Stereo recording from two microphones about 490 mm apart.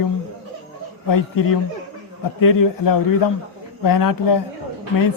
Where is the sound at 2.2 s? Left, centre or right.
Left.